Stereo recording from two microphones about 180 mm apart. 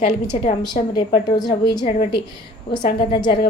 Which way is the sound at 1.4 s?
20° left (ahead or behind).